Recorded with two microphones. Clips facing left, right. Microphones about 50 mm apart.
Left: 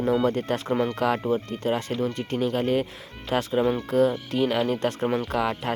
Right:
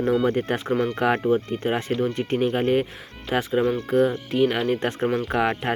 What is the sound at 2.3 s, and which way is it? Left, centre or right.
Speech, right.